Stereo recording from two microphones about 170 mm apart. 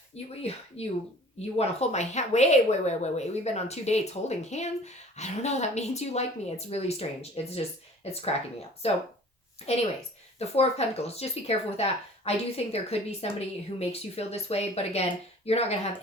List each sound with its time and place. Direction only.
0.1 s a woman's voice: 40° left (ahead or behind)
10.3 s a woman's voice: 40° left (ahead or behind)